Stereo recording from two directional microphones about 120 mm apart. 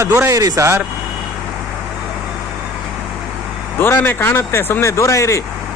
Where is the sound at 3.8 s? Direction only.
15° left (ahead or behind).